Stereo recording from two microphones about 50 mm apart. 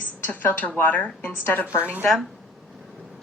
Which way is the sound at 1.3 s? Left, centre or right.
Left.